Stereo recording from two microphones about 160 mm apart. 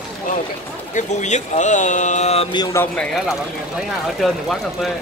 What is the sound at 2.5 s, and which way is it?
Speech, 25° left (ahead or behind).